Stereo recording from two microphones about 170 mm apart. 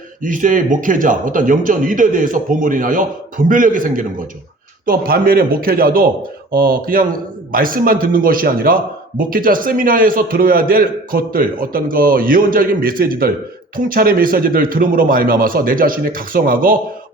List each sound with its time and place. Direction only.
0.2 s a man's voice: 50° right (ahead or behind)